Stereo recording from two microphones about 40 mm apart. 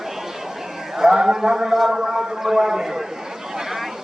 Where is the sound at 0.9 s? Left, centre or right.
Centre.